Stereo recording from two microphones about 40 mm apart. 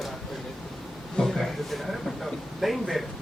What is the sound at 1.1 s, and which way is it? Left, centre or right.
A man's voice, centre.